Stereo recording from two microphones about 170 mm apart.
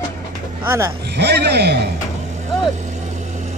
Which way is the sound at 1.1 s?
80° right.